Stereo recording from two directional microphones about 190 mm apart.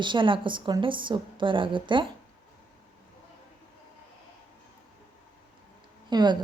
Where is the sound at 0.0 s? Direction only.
25° right (ahead or behind).